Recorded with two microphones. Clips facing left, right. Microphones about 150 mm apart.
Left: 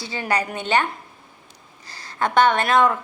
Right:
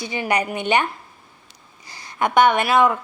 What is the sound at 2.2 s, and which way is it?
Speech, 10° right (ahead or behind).